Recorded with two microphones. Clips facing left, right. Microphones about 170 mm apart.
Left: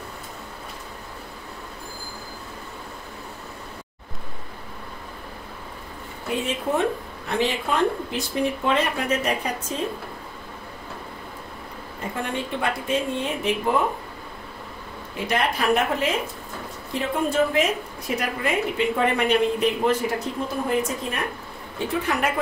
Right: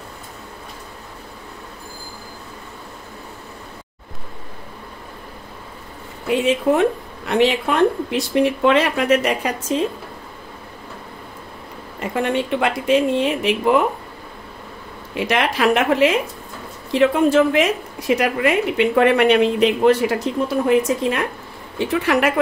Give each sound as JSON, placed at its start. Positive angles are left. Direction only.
{"t": 6.7, "sound": "a woman's voice", "side_deg": -75}
{"t": 12.0, "sound": "a woman's voice", "side_deg": -75}
{"t": 15.1, "sound": "a woman's voice", "side_deg": -90}